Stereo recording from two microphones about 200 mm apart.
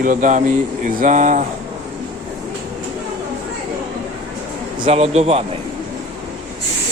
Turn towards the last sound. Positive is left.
turn(degrees=-30)  # may be behind; listen again after turning